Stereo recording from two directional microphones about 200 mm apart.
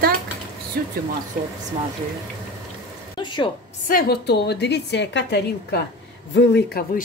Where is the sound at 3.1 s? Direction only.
25° left (ahead or behind).